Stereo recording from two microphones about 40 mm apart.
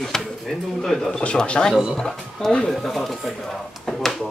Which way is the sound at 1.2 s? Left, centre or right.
Left.